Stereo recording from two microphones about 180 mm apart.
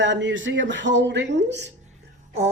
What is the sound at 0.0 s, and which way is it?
Speech, 85° right.